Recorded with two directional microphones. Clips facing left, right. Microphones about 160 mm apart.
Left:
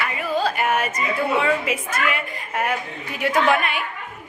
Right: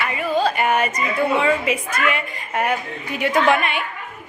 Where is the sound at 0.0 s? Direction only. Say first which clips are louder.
Right 3 dB; centre (ahead or behind).